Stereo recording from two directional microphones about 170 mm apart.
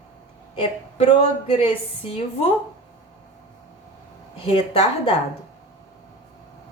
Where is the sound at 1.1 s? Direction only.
30° left (ahead or behind).